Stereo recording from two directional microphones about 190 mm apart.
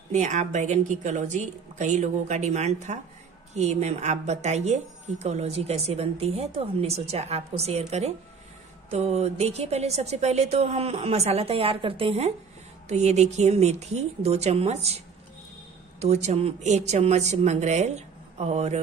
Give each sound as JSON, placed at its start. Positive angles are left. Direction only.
{"t": 0.1, "sound": "speech", "side_deg": -40}
{"t": 16.0, "sound": "speech", "side_deg": -35}